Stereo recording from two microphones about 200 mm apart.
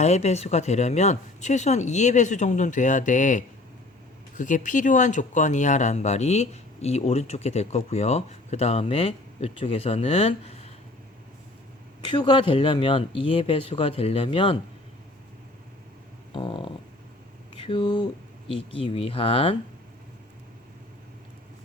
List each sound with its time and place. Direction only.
0.0 s speech: 35° left (ahead or behind)
12.0 s speech: 20° left (ahead or behind)
16.3 s speech: 25° left (ahead or behind)